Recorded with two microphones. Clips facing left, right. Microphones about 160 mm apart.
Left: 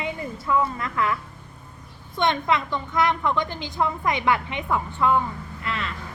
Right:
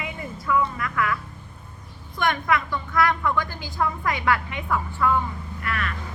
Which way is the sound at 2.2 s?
25° left (ahead or behind).